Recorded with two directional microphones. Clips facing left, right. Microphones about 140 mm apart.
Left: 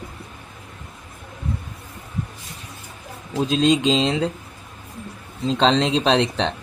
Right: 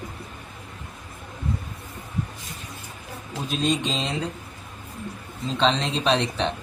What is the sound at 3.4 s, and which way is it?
Speech, 90° left.